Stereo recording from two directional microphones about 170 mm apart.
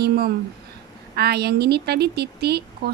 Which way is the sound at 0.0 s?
70° right (ahead or behind).